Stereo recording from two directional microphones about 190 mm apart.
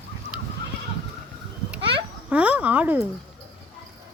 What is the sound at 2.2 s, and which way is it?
Speech, 5° right (ahead or behind).